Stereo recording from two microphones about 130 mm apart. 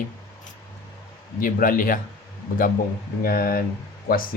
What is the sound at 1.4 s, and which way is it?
Speech, 90° left.